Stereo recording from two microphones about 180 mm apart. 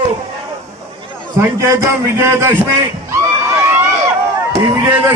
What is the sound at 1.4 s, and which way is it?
A man's voice, 15° right (ahead or behind).